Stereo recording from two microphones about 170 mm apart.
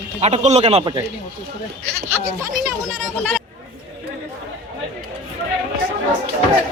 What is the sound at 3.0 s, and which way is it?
Speech, 5° left (ahead or behind).